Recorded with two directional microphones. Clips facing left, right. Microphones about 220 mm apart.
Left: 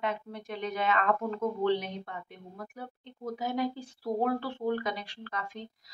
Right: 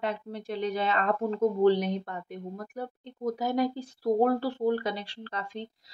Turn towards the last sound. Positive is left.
turn(degrees=-30)  # may be behind; listen again after turning